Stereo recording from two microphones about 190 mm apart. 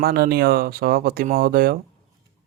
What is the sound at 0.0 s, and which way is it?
Speech, 55° right (ahead or behind).